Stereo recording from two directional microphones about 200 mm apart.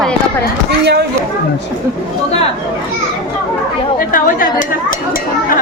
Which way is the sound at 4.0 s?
45° left (ahead or behind).